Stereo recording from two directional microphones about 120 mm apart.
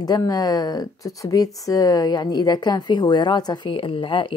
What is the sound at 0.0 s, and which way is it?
A woman's voice, 35° left (ahead or behind).